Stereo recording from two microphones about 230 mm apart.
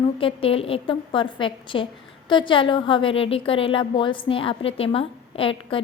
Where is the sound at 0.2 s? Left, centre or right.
Left.